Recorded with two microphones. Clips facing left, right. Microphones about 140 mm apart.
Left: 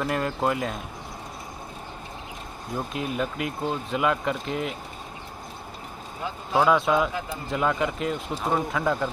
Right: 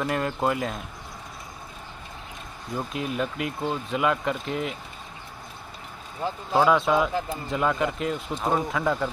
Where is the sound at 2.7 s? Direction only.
Centre (ahead or behind).